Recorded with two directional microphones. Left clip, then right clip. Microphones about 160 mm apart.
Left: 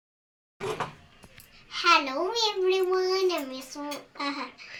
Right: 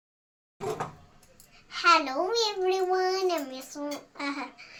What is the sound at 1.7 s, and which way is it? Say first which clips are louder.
A child's voice: even; 10° right (ahead or behind).